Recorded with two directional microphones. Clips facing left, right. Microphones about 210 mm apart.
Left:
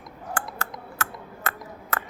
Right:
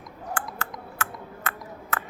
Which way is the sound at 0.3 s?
40° left (ahead or behind).